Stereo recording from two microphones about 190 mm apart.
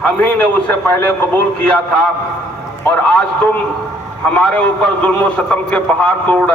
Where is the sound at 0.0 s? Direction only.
10° left (ahead or behind).